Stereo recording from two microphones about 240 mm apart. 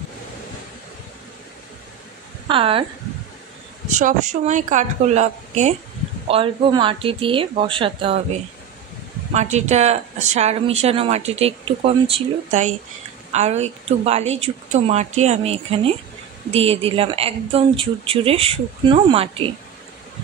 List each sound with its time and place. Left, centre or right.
2.4 s a woman's voice: right
3.9 s speech: right